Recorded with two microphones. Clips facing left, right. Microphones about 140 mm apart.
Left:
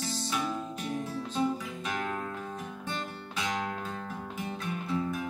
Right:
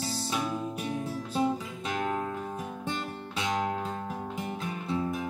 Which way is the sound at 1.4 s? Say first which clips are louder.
Right 2 dB; 25° right (ahead or behind).